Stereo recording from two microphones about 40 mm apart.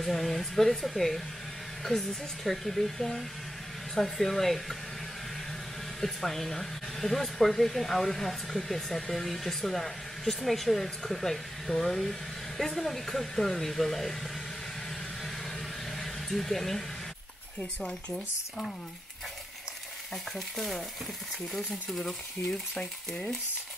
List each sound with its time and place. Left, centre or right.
0.0 s a woman's voice: centre
5.9 s speech: centre
16.0 s a sound: centre
17.8 s speech: centre
20.3 s speech: centre
22.5 s speech: left